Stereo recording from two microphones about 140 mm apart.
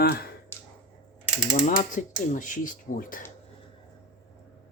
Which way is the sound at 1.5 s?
65° left (ahead or behind).